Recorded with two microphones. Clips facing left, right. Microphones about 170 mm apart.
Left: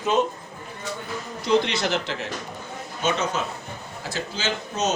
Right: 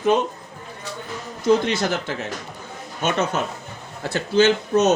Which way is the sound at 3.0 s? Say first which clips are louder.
Right 3 dB; 60° right (ahead or behind).